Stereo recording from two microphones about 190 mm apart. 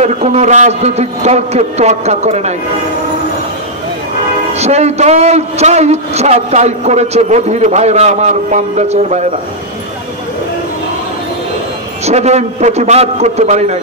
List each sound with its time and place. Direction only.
0.0 s a man's voice: 35° right (ahead or behind)
4.6 s a man's voice: 35° right (ahead or behind)
12.1 s a man's voice: 35° right (ahead or behind)